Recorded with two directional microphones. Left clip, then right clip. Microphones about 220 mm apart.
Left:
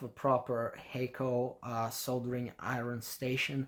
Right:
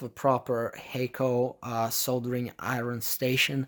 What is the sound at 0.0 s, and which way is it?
Speech, 40° right (ahead or behind).